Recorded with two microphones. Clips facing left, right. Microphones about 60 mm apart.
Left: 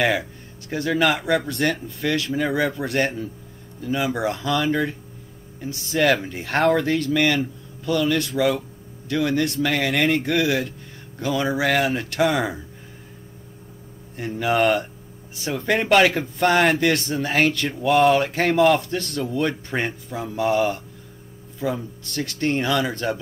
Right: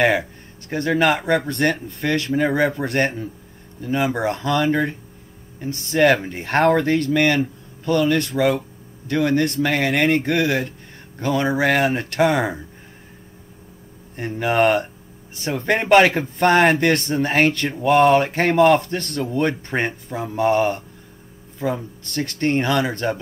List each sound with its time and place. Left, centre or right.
0.7 s speech: right
1.5 s speech: right
2.0 s speech: right
5.6 s speech: right
6.2 s speech: right
7.0 s speech: right
10.1 s speech: right
14.1 s speech: right